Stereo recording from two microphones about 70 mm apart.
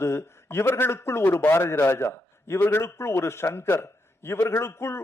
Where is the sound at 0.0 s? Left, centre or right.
Left.